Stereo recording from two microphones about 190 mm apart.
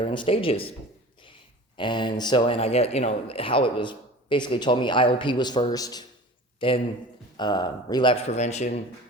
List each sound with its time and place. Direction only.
0.0 s speech: 25° left (ahead or behind)
1.7 s speech: 25° left (ahead or behind)